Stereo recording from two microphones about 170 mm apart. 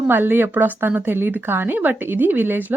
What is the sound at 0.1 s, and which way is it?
Speech, 10° right (ahead or behind).